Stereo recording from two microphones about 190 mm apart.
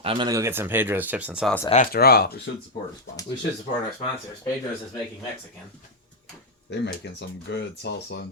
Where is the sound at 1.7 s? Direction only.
45° left (ahead or behind).